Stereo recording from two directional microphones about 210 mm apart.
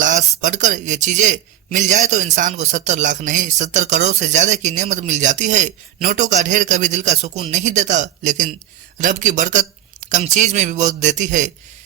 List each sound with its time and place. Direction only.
0.0 s a man's voice: 35° right (ahead or behind)